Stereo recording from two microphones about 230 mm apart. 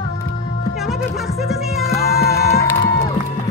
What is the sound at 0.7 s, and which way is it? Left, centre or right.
Speech, centre.